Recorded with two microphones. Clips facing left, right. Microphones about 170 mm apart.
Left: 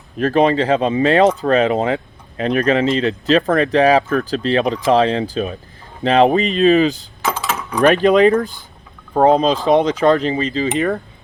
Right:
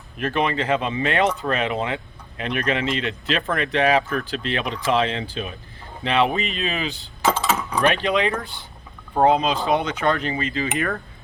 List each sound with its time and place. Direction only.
0.2 s speech: 35° left (ahead or behind)